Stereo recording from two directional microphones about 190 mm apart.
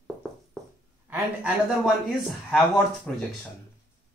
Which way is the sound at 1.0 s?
10° right (ahead or behind).